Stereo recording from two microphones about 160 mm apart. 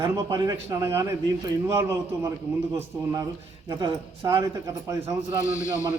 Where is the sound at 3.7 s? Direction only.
25° right (ahead or behind).